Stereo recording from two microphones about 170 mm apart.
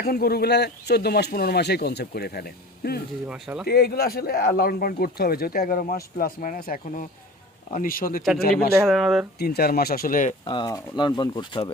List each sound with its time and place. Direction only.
0.0 s speech: 65° left (ahead or behind)
3.2 s speech: 5° right (ahead or behind)
3.7 s speech: 65° left (ahead or behind)
8.9 s speech: centre (ahead or behind)
9.4 s speech: 65° left (ahead or behind); by 10.3 s 50° left (ahead or behind)
10.4 s speech: 25° left (ahead or behind)